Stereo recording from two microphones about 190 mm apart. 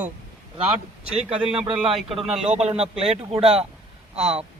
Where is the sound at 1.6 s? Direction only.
30° right (ahead or behind).